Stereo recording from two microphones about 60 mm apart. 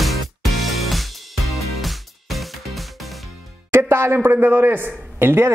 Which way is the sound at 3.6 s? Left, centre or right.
Right.